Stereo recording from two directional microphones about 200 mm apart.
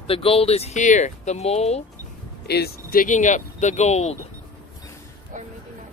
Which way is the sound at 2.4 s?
55° left (ahead or behind).